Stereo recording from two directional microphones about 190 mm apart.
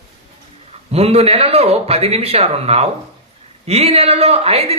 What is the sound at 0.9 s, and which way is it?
A woman's voice, 35° right (ahead or behind).